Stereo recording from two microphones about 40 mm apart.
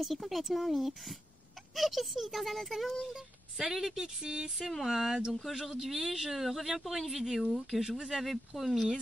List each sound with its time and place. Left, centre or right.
0.0 s a woman's voice: centre
4.6 s a woman's voice: centre